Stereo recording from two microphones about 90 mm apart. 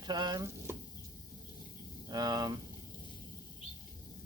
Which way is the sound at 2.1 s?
50° right (ahead or behind).